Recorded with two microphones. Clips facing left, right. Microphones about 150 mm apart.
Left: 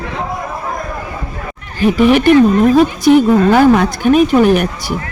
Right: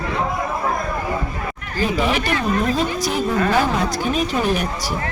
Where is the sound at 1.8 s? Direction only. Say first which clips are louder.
Left 11 dB; 65° left (ahead or behind).